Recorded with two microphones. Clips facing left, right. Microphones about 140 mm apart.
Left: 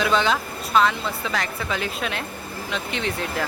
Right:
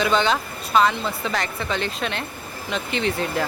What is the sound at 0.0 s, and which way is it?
Speech, centre (ahead or behind).